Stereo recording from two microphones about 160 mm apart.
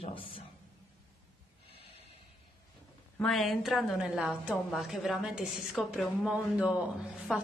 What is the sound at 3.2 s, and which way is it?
A woman's voice, centre (ahead or behind).